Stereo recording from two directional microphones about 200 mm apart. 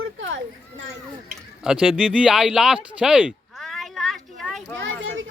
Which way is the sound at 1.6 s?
Centre (ahead or behind).